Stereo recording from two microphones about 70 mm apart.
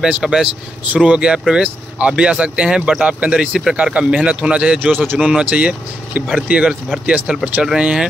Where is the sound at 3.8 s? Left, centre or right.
Centre.